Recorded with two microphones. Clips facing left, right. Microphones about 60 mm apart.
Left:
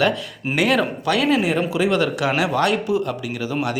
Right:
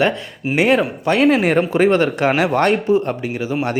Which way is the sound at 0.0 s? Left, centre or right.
Right.